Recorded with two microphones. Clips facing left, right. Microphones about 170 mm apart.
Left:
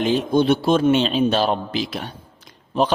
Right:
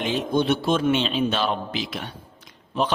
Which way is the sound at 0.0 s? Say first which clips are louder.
Left 5 dB; 35° left (ahead or behind).